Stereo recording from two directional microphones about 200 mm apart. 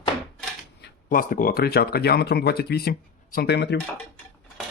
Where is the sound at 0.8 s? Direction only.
45° left (ahead or behind).